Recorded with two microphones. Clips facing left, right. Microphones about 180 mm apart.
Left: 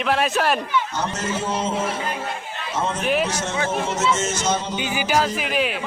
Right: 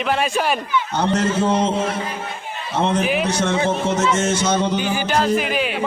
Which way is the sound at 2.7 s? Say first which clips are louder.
Right 6 dB; 65° right (ahead or behind).